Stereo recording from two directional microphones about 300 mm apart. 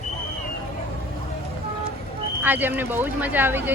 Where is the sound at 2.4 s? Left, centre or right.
Centre.